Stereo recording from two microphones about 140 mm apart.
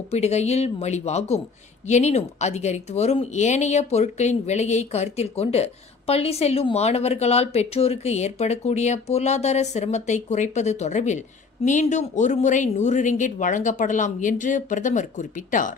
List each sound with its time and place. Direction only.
0.1 s speech: 50° left (ahead or behind); by 15.7 s 70° left (ahead or behind)